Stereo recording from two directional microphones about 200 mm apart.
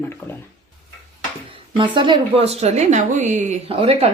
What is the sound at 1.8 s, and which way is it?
A woman's voice, 25° right (ahead or behind).